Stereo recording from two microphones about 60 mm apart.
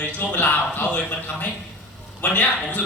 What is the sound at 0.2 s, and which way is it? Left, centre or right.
A man's voice, left.